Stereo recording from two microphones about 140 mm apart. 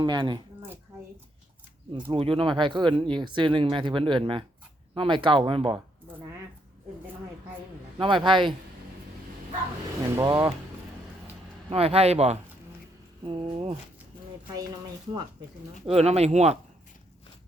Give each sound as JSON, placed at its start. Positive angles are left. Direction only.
{"t": 0.0, "sound": "speech", "side_deg": -35}
{"t": 2.0, "sound": "speech", "side_deg": -40}
{"t": 7.9, "sound": "speech", "side_deg": -35}
{"t": 10.2, "sound": "speech", "side_deg": -25}
{"t": 11.7, "sound": "a man's voice", "side_deg": -45}
{"t": 15.9, "sound": "a man's voice", "side_deg": -50}